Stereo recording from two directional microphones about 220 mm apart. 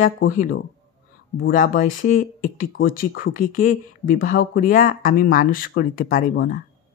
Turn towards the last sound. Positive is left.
turn(degrees=40)  # may be behind; listen again after turning